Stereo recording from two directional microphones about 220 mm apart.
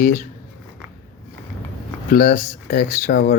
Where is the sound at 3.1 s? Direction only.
50° left (ahead or behind).